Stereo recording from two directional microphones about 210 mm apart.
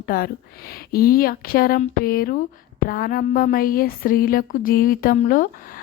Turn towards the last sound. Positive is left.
turn(degrees=40)  # may be behind; listen again after turning